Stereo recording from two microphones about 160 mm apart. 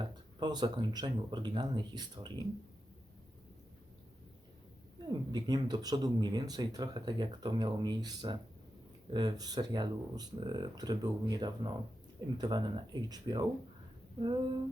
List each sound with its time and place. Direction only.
0.0 s speech: 25° right (ahead or behind)
5.0 s speech: 25° right (ahead or behind)
14.2 s a sound: 30° right (ahead or behind)